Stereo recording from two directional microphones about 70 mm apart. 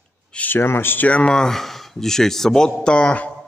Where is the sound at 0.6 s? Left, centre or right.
Left.